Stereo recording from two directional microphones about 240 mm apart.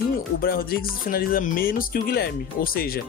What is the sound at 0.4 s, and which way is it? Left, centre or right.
Speech, left.